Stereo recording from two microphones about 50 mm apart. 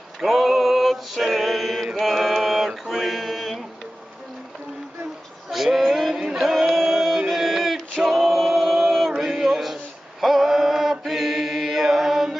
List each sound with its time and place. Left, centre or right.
0.2 s mantra: centre
5.5 s female singing: centre
5.9 s a sound: centre
6.1 s music: centre
6.7 s male singing: centre
10.2 s chant: centre